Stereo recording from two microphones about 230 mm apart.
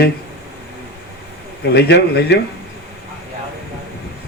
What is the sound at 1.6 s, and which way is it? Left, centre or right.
Speech, left.